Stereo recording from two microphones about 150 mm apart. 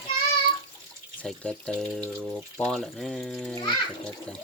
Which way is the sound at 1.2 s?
10° left (ahead or behind).